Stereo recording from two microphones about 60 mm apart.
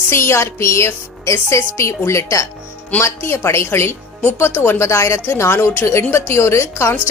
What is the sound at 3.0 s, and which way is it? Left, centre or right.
A woman's voice, left.